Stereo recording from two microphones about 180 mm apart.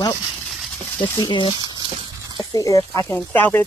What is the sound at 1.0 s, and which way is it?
Speech, 20° left (ahead or behind).